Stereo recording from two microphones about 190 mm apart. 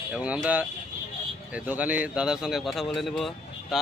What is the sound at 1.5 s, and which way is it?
Speech, 5° right (ahead or behind).